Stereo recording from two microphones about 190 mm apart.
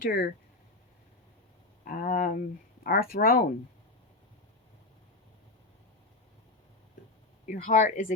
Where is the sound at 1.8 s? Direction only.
45° left (ahead or behind).